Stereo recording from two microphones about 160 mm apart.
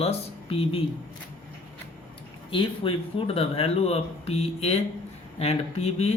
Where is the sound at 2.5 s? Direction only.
35° left (ahead or behind).